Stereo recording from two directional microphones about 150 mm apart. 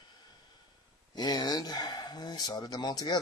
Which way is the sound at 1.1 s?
30° left (ahead or behind).